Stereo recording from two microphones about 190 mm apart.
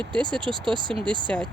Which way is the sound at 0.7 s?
25° right (ahead or behind).